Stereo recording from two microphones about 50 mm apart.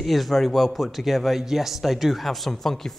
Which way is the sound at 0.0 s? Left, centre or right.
Centre.